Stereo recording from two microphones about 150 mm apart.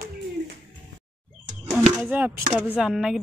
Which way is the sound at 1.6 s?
5° left (ahead or behind).